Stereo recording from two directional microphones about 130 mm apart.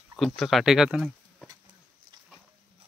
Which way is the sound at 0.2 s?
Centre (ahead or behind).